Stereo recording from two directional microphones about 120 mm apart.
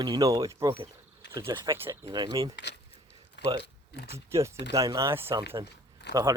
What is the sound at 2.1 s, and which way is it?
Speech, 35° right (ahead or behind).